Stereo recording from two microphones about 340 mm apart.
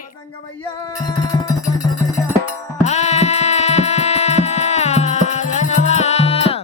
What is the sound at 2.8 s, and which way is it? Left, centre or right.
Music, centre.